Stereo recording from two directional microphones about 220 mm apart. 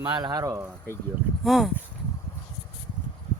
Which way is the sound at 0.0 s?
20° right (ahead or behind).